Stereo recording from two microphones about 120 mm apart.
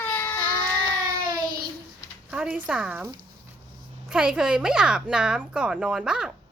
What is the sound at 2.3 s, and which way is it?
Speech, 10° right (ahead or behind).